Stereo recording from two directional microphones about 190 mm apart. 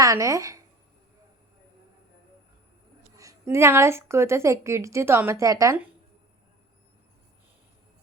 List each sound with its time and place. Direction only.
0.0 s speech: 15° right (ahead or behind)
3.2 s a woman's voice: 15° right (ahead or behind)